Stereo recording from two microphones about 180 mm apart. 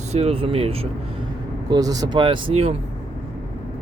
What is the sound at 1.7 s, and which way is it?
Speech, 20° right (ahead or behind).